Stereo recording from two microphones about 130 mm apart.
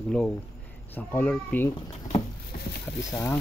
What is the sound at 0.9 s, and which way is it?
Speech, 10° left (ahead or behind).